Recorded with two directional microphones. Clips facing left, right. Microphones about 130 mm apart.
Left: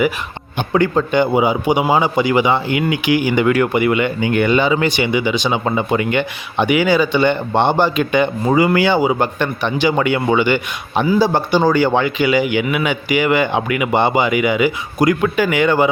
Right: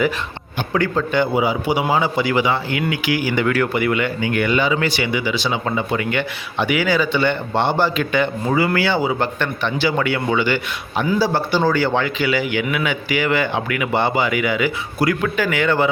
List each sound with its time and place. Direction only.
0.7 s speech: 20° left (ahead or behind)